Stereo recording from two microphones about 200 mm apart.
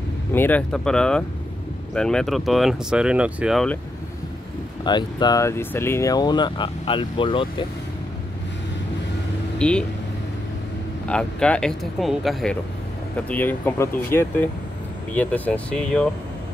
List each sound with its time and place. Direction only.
0.3 s speech: 10° left (ahead or behind)
4.8 s speech: 20° left (ahead or behind)
9.6 s speech: 5° left (ahead or behind)
11.1 s speech: 5° left (ahead or behind)